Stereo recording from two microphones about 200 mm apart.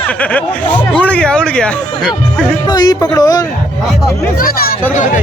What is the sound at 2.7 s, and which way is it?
Speech, 20° left (ahead or behind).